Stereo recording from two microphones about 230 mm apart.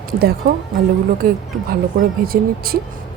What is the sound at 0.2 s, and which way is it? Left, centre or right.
Speech, right.